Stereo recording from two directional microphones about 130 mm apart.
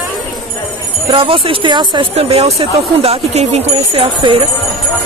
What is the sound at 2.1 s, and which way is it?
Speech, 55° right (ahead or behind).